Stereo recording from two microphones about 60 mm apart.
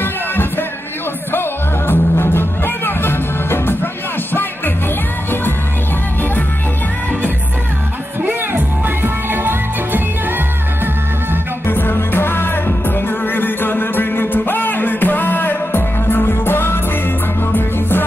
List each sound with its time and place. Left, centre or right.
0.0 s music: left
1.9 s music: left
8.3 s music: right
11.6 s music: left